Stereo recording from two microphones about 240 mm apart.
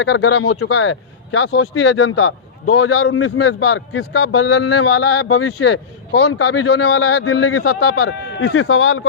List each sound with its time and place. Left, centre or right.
0.0 s speech: left